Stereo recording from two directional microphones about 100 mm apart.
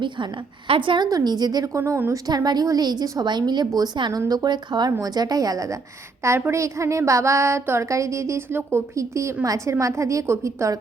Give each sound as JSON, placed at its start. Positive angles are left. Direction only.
{"t": 0.0, "sound": "a woman's voice", "side_deg": -50}
{"t": 1.0, "sound": "a woman's voice", "side_deg": -40}
{"t": 2.2, "sound": "a woman's voice", "side_deg": -40}